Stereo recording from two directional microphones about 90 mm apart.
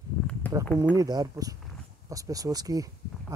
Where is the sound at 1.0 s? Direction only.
45° right (ahead or behind).